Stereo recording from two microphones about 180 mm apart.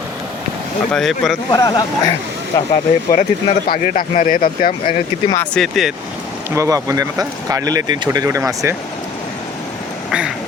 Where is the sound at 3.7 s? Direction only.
50° left (ahead or behind).